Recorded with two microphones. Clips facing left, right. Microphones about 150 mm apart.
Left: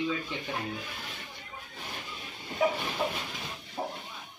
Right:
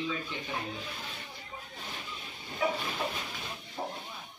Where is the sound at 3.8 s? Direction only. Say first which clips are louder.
Left 2 dB; 20° left (ahead or behind).